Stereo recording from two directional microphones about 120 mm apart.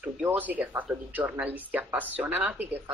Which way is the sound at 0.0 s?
15° right (ahead or behind).